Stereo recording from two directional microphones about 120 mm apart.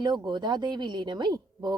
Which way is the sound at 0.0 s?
40° right (ahead or behind).